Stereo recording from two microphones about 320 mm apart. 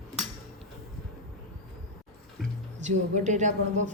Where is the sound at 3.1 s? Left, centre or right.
Right.